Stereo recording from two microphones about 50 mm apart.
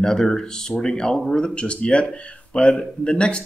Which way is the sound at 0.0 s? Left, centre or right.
Centre.